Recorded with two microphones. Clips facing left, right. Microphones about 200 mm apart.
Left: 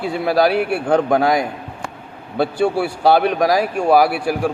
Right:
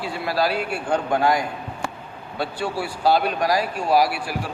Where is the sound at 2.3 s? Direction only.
65° left (ahead or behind).